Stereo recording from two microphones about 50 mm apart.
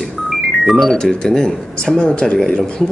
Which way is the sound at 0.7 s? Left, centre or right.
Centre.